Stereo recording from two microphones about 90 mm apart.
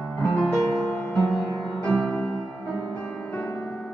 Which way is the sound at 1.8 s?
10° left (ahead or behind).